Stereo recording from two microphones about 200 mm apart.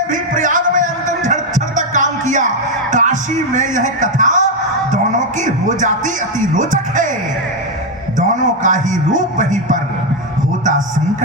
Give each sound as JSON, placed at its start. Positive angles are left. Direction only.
{"t": 0.1, "sound": "music", "side_deg": -40}
{"t": 6.6, "sound": "a man's voice", "side_deg": -40}
{"t": 8.4, "sound": "a man's voice", "side_deg": -40}